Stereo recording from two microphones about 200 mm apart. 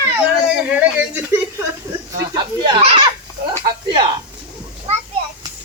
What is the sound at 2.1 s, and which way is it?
Speech, 20° right (ahead or behind).